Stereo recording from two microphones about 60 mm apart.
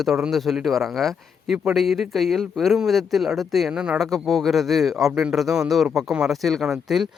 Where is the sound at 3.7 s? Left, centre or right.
Centre.